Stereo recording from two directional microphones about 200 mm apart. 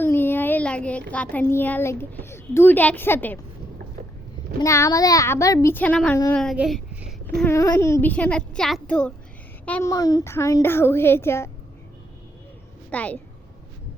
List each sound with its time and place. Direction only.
0.0 s child singing: 10° left (ahead or behind)
1.1 s a child's voice: 5° left (ahead or behind)
4.6 s a child's voice: 15° left (ahead or behind); by 7.1 s 5° right (ahead or behind)
7.3 s a child's voice: 15° left (ahead or behind)
12.9 s a woman's voice: 5° left (ahead or behind)